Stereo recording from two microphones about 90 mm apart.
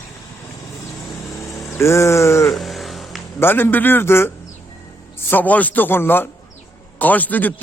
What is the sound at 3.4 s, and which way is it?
A man's voice, 25° left (ahead or behind).